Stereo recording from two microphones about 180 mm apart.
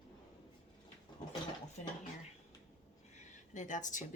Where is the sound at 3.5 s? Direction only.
45° left (ahead or behind).